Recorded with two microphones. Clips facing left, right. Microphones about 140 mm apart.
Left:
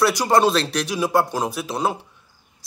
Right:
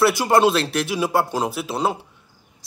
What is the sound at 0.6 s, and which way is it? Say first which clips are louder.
Speech: right 1 dB; 10° right (ahead or behind).